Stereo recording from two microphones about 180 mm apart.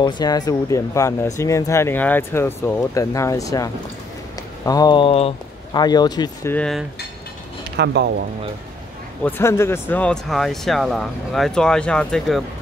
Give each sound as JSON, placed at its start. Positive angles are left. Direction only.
{"t": 0.0, "sound": "speech", "side_deg": 20}
{"t": 6.5, "sound": "speech", "side_deg": 0}
{"t": 7.7, "sound": "speech", "side_deg": -70}
{"t": 9.2, "sound": "speech", "side_deg": 15}